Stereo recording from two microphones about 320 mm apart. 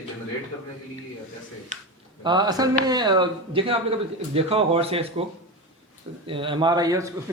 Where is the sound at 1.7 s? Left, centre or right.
Right.